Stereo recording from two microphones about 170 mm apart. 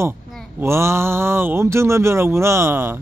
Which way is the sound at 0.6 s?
15° right (ahead or behind).